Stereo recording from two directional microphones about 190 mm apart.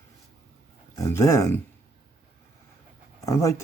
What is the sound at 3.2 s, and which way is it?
Speech, 15° left (ahead or behind).